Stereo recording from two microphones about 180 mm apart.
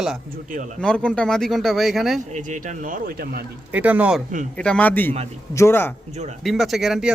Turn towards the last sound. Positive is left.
turn(degrees=-5)  # may be behind; listen again after turning